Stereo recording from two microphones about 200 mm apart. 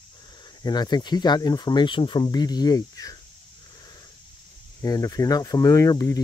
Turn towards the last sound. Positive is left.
turn(degrees=15)  # may be behind; listen again after turning